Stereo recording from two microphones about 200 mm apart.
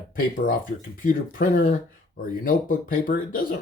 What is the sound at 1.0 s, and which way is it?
Speech, 45° left (ahead or behind).